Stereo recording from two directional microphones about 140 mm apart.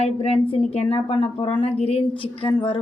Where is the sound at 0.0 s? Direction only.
50° left (ahead or behind).